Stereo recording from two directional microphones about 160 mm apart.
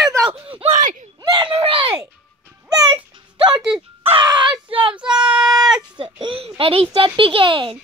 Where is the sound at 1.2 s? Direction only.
30° right (ahead or behind).